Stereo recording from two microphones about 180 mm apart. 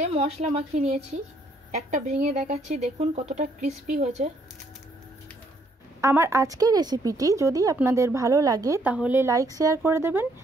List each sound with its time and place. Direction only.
0.0 s speech: 35° right (ahead or behind)
5.9 s a woman's voice: 15° right (ahead or behind)